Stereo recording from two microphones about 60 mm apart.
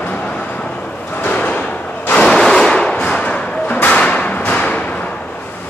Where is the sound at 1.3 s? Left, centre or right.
Left.